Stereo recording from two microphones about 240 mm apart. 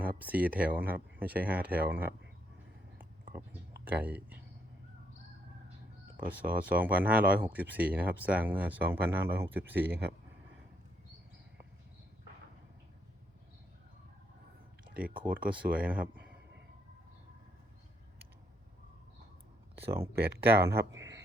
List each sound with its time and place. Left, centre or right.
0.2 s speech: centre
3.0 s a sound: centre
3.8 s speech: centre
6.1 s speech: centre
15.2 s speech: centre
19.8 s speech: centre
20.2 s speech: right
20.9 s a sound: centre